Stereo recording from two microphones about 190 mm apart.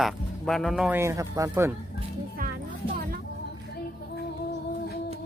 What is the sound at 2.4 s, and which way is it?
Music, 45° right (ahead or behind).